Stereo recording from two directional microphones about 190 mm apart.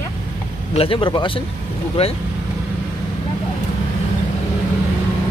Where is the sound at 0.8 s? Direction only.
25° left (ahead or behind).